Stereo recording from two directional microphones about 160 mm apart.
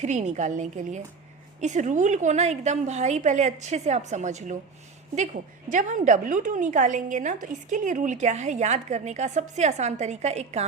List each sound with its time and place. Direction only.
0.0 s a woman's voice: 45° right (ahead or behind)